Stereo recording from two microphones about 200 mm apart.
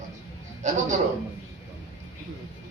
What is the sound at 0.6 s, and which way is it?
Speech, 35° right (ahead or behind).